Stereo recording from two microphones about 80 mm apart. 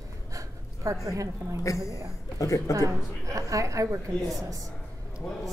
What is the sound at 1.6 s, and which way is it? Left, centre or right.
A man's voice, left.